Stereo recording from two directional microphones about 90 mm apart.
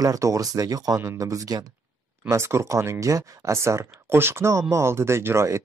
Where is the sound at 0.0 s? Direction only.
40° right (ahead or behind).